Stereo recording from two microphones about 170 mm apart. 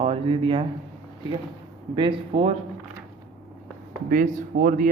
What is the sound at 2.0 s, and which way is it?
Speech, 30° right (ahead or behind).